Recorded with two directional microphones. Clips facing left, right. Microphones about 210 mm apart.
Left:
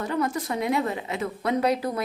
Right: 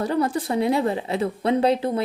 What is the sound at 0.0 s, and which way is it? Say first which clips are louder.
A woman's voice: right 4 dB; 35° right (ahead or behind).